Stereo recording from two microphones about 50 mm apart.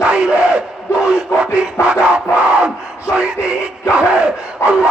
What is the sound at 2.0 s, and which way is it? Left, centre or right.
Crowd, right.